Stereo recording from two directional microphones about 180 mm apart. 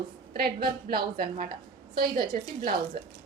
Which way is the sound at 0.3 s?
60° right (ahead or behind).